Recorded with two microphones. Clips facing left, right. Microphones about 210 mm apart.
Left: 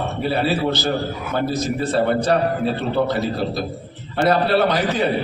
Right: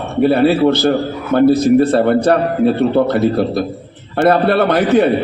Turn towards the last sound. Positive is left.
turn(degrees=-55)  # may be behind; listen again after turning